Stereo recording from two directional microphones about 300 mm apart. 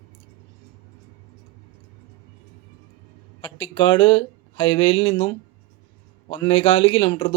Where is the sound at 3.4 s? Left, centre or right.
Centre.